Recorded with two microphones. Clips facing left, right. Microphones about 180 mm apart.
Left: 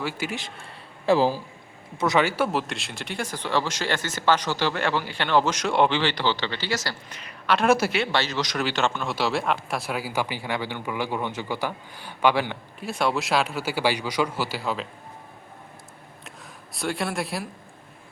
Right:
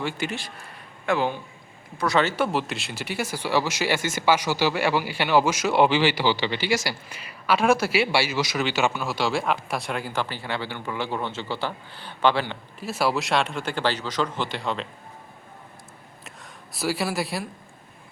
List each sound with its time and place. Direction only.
0.0 s a man's voice: 5° left (ahead or behind)
1.0 s speech: 30° left (ahead or behind)
2.0 s a man's voice: 15° left (ahead or behind)
12.8 s speech: 5° right (ahead or behind)
16.2 s a sound: centre (ahead or behind)